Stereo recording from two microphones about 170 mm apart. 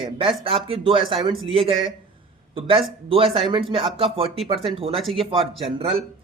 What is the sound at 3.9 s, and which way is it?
Speech, 35° right (ahead or behind).